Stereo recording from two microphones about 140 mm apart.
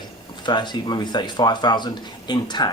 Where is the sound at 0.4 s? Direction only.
35° left (ahead or behind).